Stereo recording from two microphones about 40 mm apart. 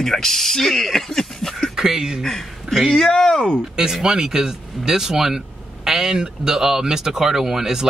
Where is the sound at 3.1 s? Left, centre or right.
Centre.